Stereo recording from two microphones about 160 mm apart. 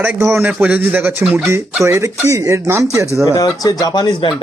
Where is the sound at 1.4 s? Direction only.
15° right (ahead or behind).